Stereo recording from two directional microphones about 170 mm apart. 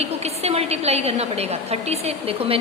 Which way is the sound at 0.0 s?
40° right (ahead or behind).